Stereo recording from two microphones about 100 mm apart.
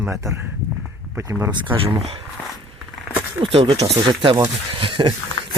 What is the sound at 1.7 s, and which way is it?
Speech, 65° right (ahead or behind).